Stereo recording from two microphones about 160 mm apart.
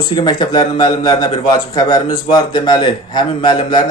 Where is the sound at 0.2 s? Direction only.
30° left (ahead or behind).